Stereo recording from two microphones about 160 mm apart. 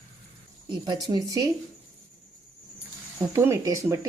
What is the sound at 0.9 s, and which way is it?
Speech, 25° right (ahead or behind).